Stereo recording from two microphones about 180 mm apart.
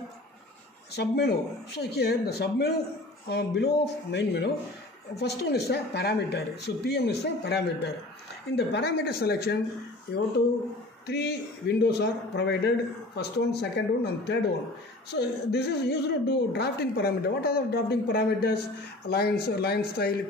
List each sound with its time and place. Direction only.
0.9 s a woman's voice: 65° left (ahead or behind)
11.1 s a man's voice: 65° left (ahead or behind)